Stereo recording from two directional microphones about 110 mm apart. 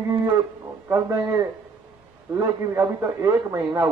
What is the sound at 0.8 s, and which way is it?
A man's voice, 25° right (ahead or behind).